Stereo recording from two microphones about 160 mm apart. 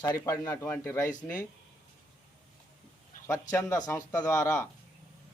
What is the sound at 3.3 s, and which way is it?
Speech, 20° left (ahead or behind).